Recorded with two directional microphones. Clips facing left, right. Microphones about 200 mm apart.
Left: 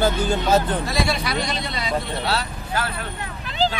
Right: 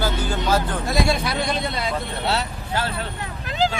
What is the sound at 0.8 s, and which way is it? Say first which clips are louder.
A man's voice: right 2 dB; 50° right (ahead or behind).